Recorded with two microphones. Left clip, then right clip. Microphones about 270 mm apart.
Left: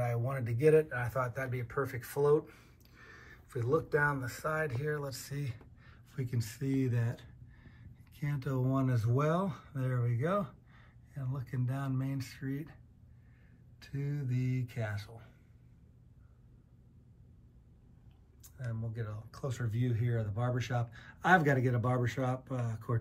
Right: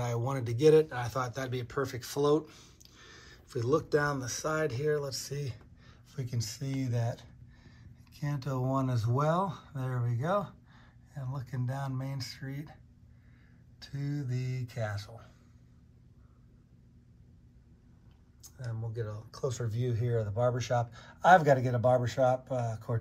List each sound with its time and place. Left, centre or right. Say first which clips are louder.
0.0 s speech: right 2 dB; centre
14.3 s speech: left 1 dB; right
18.4 s speech: right 1 dB; right